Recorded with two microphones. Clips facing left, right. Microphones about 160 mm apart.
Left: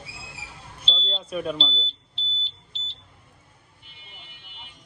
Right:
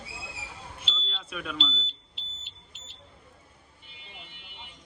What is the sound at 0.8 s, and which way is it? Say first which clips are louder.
Smoke detector: left 7 dB; 30° left (ahead or behind).